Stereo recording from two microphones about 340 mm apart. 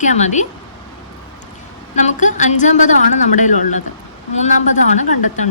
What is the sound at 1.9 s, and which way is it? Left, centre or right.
A woman's voice, left.